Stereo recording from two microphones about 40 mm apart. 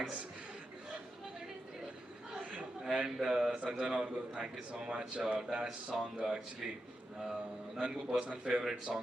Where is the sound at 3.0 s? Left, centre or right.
Centre.